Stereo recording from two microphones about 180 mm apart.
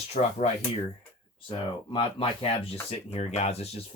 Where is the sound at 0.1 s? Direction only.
35° left (ahead or behind).